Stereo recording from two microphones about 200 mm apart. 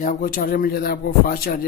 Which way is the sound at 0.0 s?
40° left (ahead or behind).